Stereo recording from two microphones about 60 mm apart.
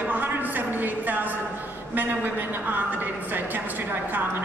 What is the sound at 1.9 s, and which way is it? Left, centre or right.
A woman's voice, right.